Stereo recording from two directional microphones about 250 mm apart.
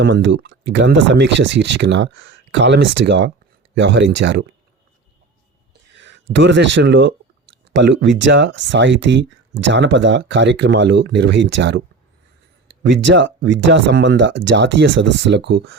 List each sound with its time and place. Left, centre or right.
0.0 s speech: right
6.0 s speech: right